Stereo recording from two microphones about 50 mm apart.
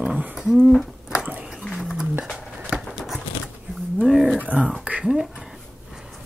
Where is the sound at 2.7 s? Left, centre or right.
Centre.